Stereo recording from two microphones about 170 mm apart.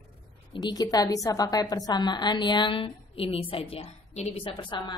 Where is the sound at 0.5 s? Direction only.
25° left (ahead or behind).